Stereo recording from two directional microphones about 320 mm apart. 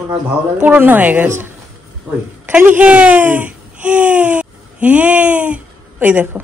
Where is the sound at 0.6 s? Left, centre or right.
Centre.